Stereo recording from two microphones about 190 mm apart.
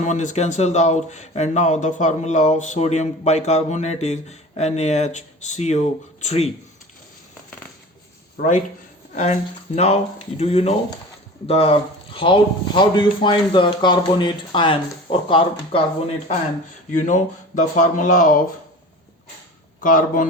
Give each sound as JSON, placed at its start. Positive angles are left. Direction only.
{"t": 0.0, "sound": "speech", "side_deg": 40}
{"t": 8.4, "sound": "speech", "side_deg": 50}
{"t": 9.1, "sound": "speech", "side_deg": 35}
{"t": 17.0, "sound": "speech", "side_deg": 40}
{"t": 19.8, "sound": "speech", "side_deg": 45}